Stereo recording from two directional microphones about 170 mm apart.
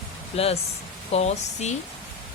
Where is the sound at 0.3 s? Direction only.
35° left (ahead or behind).